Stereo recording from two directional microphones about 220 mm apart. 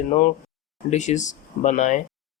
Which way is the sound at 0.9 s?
35° left (ahead or behind).